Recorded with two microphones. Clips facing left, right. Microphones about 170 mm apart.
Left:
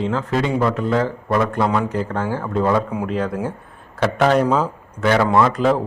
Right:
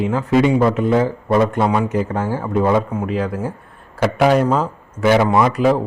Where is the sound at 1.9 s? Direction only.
10° right (ahead or behind).